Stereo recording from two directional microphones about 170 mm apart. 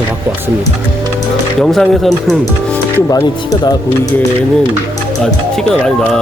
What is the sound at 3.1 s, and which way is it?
Speech, 20° left (ahead or behind).